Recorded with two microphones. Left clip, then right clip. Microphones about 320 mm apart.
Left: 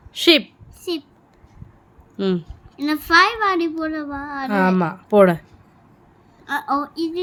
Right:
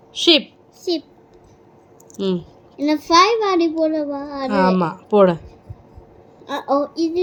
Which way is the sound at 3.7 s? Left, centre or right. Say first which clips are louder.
Right 6 dB; centre.